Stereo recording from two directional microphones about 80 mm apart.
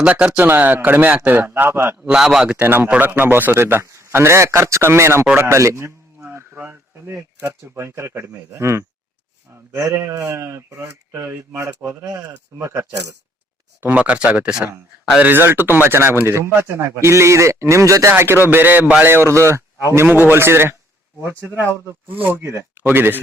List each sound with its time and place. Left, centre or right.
0.0 s a man's voice: centre
2.1 s speech: centre
2.6 s a man's voice: right
13.9 s a man's voice: centre
19.0 s speech: right
19.9 s a man's voice: right